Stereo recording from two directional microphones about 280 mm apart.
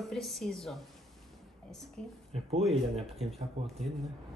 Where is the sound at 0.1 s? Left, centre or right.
Centre.